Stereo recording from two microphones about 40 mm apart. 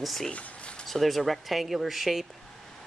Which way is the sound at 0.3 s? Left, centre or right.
Left.